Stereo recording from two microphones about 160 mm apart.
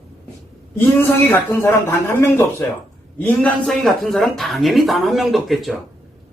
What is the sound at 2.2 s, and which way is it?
Speech, 15° left (ahead or behind).